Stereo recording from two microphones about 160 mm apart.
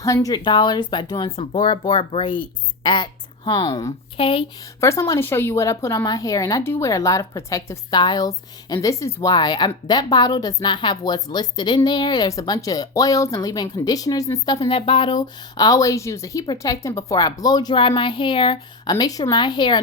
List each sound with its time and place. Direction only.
0.0 s speech: 20° left (ahead or behind)
4.8 s speech: 20° left (ahead or behind)